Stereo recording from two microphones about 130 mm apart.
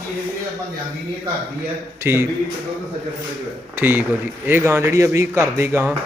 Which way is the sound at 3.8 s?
15° right (ahead or behind).